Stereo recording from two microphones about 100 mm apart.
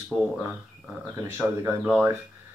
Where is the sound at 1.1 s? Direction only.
25° right (ahead or behind).